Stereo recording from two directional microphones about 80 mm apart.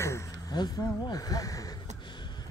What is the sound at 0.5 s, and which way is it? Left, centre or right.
Speech, left.